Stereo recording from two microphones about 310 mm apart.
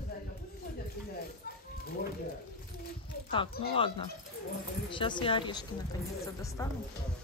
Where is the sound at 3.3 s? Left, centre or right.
Centre.